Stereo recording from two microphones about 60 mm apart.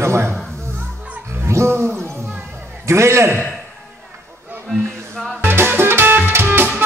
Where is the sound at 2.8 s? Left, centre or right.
Right.